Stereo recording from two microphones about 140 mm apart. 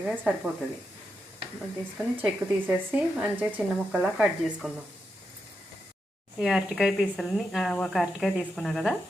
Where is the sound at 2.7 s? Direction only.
10° right (ahead or behind).